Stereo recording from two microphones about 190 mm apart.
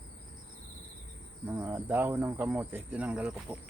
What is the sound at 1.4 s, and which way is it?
Speech, 10° right (ahead or behind).